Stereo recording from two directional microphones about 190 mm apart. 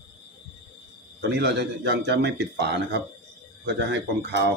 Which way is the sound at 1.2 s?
65° right (ahead or behind).